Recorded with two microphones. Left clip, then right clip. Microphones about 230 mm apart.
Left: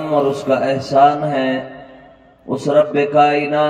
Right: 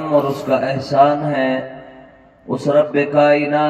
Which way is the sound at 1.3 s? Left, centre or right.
Centre.